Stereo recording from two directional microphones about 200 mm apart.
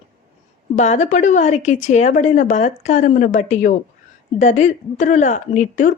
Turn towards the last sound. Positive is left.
turn(degrees=40)  # may be behind; listen again after turning